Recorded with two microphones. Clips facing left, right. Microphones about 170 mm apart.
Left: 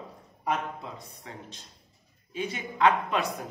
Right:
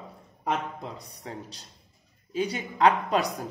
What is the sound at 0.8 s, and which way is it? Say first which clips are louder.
Speech: right 3 dB; 35° right (ahead or behind).